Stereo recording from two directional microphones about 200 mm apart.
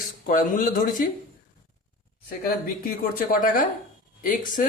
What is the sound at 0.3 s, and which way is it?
Speech, 40° left (ahead or behind).